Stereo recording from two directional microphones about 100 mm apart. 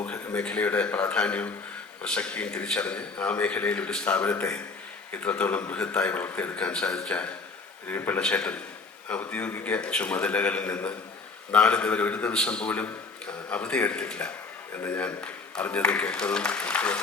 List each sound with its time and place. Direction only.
0.0 s a man's voice: 10° left (ahead or behind)